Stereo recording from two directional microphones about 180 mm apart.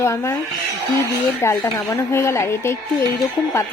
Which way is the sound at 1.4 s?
15° left (ahead or behind).